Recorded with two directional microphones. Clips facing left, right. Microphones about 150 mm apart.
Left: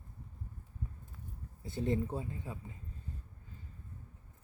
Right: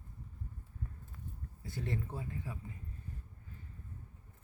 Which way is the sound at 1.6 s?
25° left (ahead or behind).